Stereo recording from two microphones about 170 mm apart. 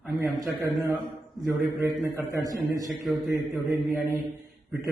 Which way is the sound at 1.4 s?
15° right (ahead or behind).